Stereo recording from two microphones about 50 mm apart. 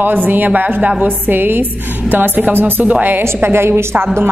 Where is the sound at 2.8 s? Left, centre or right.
Right.